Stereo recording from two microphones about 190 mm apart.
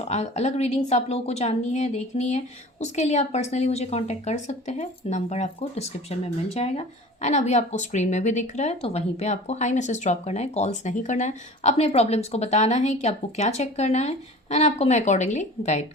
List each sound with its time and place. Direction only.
0.0 s a woman's voice: 35° left (ahead or behind)